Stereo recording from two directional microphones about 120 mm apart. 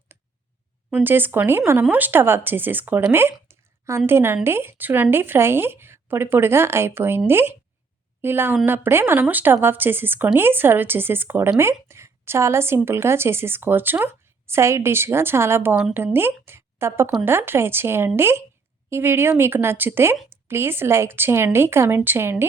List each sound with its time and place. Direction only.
0.9 s speech: 15° right (ahead or behind)
15.7 s speech: 5° right (ahead or behind)
16.1 s speech: 20° right (ahead or behind)